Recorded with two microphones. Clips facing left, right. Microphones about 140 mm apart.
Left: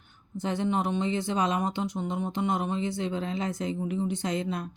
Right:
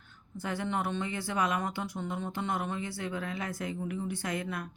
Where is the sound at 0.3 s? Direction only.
20° left (ahead or behind).